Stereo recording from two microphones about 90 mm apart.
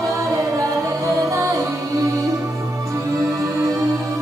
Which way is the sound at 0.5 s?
35° right (ahead or behind).